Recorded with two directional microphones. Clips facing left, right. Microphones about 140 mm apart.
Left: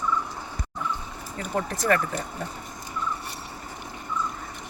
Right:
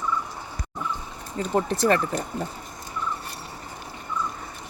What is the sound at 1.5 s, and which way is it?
Speech, 25° right (ahead or behind).